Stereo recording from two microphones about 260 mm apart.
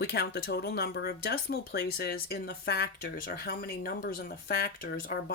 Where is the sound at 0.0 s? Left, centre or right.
Left.